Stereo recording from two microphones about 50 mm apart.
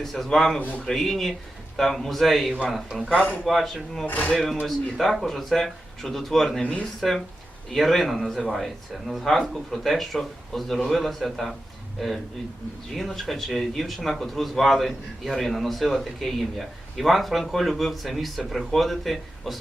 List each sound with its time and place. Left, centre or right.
0.0 s speech: centre
3.1 s a man's voice: left
3.4 s speech: centre
4.0 s speech: left
4.6 s speech: centre
6.6 s a man's voice: left
7.7 s speech: centre